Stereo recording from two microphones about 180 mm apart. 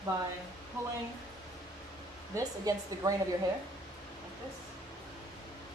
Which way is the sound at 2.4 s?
20° right (ahead or behind).